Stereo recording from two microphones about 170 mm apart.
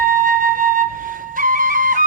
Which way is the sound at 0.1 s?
55° right (ahead or behind).